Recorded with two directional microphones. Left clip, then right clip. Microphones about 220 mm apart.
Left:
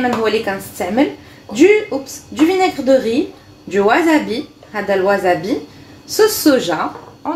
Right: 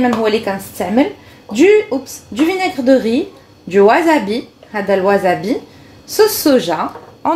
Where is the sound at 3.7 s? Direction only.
40° right (ahead or behind).